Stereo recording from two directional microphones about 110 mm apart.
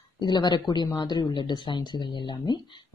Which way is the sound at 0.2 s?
40° left (ahead or behind).